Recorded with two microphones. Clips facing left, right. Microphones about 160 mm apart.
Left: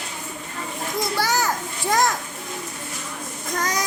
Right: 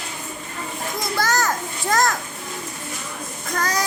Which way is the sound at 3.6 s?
15° left (ahead or behind).